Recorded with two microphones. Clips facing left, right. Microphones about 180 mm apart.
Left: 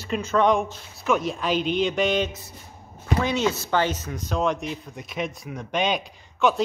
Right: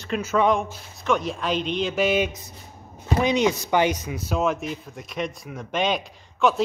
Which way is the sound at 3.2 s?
15° right (ahead or behind).